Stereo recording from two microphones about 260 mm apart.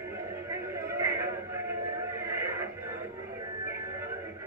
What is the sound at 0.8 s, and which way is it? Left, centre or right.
Music, centre.